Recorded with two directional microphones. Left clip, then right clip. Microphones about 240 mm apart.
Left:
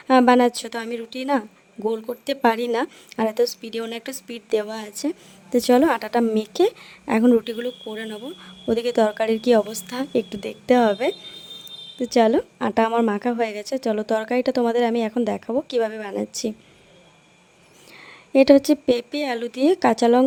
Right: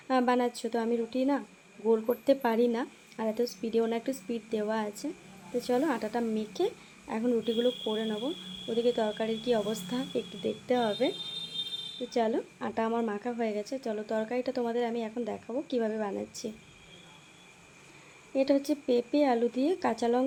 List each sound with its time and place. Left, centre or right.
0.1 s a woman's voice: left
1.9 s speech: centre
2.2 s a woman's voice: left
7.6 s speech: centre
8.7 s a woman's voice: left
18.3 s a woman's voice: left